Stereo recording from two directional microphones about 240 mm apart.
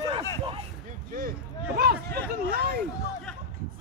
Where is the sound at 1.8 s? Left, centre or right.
Right.